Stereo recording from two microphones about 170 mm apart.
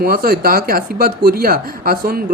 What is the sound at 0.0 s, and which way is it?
Speech, 60° right (ahead or behind).